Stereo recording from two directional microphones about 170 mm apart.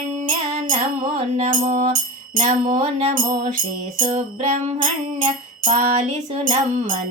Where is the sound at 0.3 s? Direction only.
45° right (ahead or behind).